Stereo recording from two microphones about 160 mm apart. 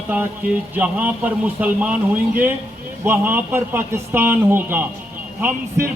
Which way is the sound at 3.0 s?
15° right (ahead or behind).